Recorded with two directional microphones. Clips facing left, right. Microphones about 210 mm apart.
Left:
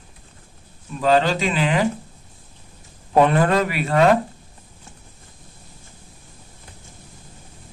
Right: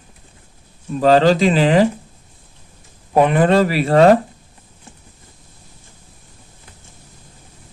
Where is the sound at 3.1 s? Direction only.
15° right (ahead or behind).